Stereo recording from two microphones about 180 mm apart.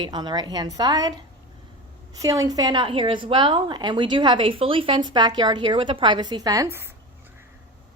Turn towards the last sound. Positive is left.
turn(degrees=-15)  # may be behind; listen again after turning